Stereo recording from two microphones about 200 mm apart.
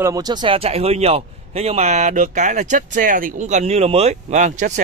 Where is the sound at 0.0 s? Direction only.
20° right (ahead or behind).